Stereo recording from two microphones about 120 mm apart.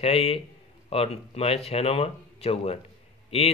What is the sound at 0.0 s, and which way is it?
Speech, 55° left (ahead or behind).